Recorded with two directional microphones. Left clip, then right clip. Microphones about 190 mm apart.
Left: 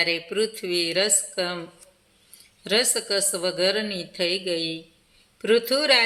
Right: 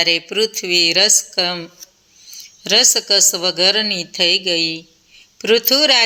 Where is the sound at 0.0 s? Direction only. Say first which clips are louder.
Right 7 dB; 35° right (ahead or behind).